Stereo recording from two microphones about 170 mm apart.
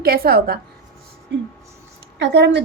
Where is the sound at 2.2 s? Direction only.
90° right.